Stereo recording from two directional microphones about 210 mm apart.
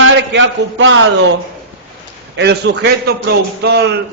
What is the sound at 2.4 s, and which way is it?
A man's voice, 50° right (ahead or behind).